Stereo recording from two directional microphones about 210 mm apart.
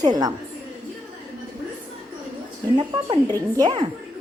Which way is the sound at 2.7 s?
20° right (ahead or behind).